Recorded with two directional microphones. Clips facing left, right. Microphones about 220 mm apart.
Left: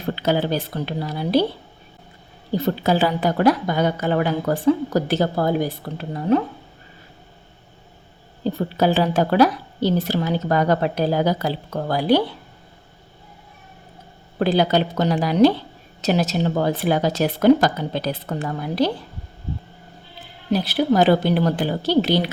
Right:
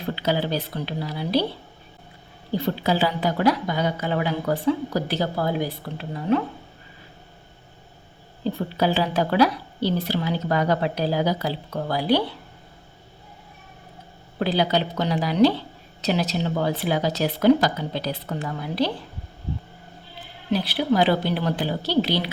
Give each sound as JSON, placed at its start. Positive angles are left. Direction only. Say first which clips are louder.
{"t": 0.2, "sound": "a woman's voice", "louder": "left 4 dB", "side_deg": 50}
{"t": 2.6, "sound": "a woman's voice", "louder": "left 3 dB", "side_deg": 45}
{"t": 8.5, "sound": "a woman's voice", "louder": "left 4 dB", "side_deg": 50}
{"t": 14.3, "sound": "a woman's voice", "louder": "left 4 dB", "side_deg": 50}
{"t": 20.5, "sound": "a woman's voice", "louder": "left 3 dB", "side_deg": 45}